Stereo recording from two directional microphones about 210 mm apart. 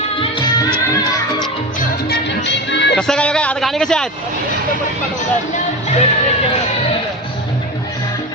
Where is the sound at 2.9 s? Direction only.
5° left (ahead or behind).